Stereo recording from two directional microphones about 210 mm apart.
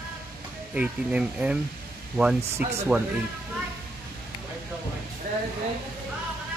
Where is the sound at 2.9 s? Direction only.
5° right (ahead or behind).